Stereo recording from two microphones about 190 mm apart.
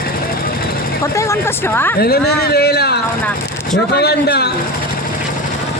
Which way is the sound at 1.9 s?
55° left (ahead or behind).